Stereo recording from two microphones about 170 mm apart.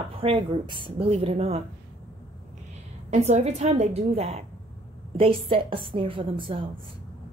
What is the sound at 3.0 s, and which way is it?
A woman's voice, 40° right (ahead or behind).